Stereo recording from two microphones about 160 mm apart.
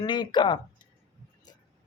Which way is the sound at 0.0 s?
25° left (ahead or behind).